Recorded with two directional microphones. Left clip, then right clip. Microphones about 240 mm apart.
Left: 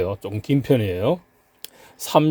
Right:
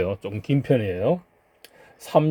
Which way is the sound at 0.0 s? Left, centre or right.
Centre.